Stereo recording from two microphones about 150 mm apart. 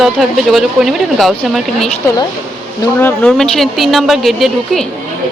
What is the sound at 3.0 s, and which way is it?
Speech, 5° left (ahead or behind).